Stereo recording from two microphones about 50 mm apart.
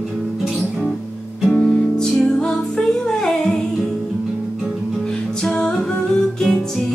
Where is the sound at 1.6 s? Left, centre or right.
Centre.